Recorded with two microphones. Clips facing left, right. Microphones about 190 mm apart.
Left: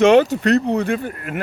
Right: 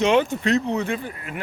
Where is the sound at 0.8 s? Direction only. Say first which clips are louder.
Left 5 dB; 55° left (ahead or behind).